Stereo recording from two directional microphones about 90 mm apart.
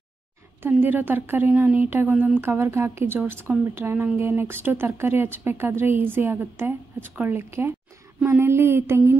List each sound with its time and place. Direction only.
0.6 s speech: 20° right (ahead or behind)
2.4 s speech: 25° right (ahead or behind)